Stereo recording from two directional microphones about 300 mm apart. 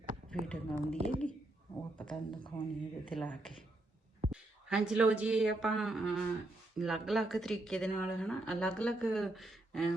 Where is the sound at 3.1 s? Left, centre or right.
Centre.